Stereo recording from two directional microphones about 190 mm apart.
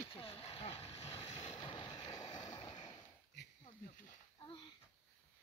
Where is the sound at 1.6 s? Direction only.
25° left (ahead or behind).